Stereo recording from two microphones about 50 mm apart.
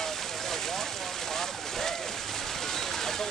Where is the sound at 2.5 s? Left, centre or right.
Centre.